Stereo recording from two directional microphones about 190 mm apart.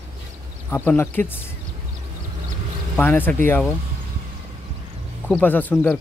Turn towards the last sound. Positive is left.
turn(degrees=0)  # may be behind; listen again after turning